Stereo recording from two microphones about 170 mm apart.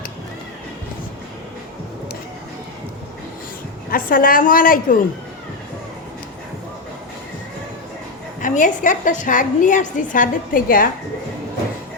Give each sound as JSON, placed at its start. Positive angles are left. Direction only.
{"t": 3.9, "sound": "a woman's voice", "side_deg": 55}
{"t": 8.4, "sound": "a woman's voice", "side_deg": 50}